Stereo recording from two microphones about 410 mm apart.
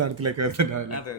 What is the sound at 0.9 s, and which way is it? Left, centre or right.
Speech, left.